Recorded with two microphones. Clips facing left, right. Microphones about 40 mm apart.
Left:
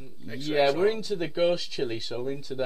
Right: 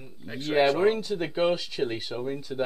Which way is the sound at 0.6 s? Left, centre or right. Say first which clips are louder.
Right 1 dB; centre.